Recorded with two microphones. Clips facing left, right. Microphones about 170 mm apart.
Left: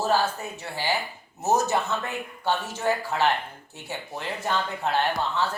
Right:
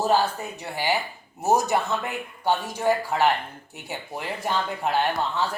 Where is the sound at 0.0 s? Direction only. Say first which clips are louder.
Right 2 dB; 15° right (ahead or behind).